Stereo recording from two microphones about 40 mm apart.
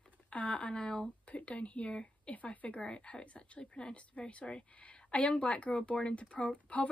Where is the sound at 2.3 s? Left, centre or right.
Left.